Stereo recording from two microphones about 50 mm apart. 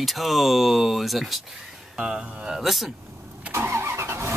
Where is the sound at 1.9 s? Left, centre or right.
Centre.